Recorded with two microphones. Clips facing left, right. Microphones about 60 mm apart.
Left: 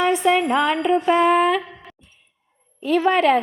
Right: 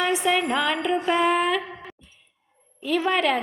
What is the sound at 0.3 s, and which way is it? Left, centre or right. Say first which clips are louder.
A woman's voice: left 5 dB; centre.